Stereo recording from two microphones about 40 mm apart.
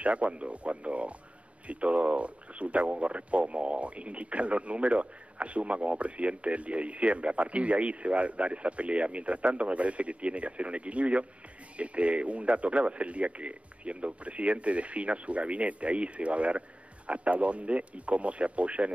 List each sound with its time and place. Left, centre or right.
0.0 s speech: right